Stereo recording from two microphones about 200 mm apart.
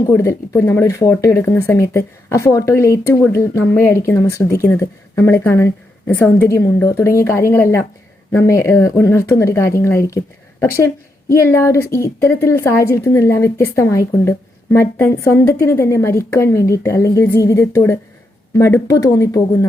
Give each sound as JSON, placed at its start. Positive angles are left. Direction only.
{"t": 0.0, "sound": "speech", "side_deg": 15}